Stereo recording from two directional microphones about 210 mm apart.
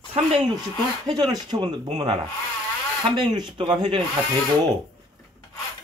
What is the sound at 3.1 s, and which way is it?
Speech, 20° right (ahead or behind).